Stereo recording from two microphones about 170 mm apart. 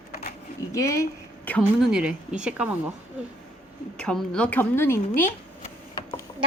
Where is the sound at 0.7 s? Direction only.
20° left (ahead or behind).